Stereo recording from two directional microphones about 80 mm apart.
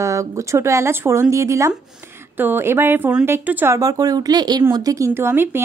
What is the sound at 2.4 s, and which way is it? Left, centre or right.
Speech, right.